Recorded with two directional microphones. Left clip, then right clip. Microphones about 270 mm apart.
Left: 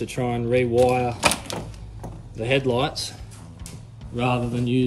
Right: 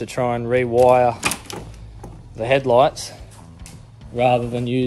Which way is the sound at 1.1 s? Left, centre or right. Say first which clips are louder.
Left 2 dB; centre.